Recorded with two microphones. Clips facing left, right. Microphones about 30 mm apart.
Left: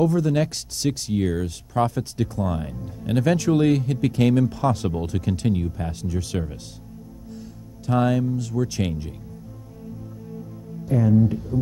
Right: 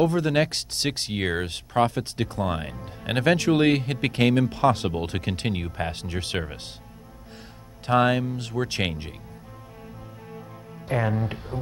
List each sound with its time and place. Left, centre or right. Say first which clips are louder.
0.0 s speech: left 1 dB; right
10.3 s music: left 5 dB; right